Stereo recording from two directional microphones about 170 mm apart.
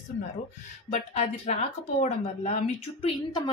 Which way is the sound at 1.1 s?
40° left (ahead or behind).